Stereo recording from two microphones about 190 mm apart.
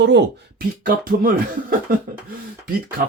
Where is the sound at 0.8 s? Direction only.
50° right (ahead or behind).